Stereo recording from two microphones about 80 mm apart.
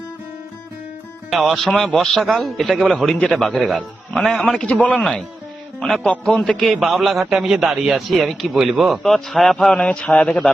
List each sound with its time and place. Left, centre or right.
1.4 s a man's voice: centre
4.6 s a man's voice: centre